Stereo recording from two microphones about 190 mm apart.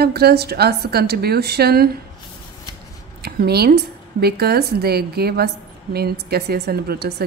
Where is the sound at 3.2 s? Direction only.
55° right (ahead or behind).